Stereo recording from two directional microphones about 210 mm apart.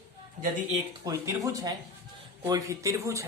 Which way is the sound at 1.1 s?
15° right (ahead or behind).